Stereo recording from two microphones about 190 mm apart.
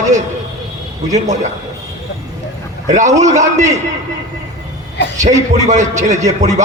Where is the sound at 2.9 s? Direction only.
40° right (ahead or behind).